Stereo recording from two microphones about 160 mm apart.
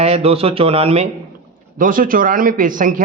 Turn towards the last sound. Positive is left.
turn(degrees=-55)  # may be behind; listen again after turning